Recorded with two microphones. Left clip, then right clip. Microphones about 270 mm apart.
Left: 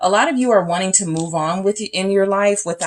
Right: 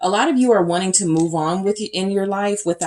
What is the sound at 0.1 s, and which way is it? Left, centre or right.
Speech, left.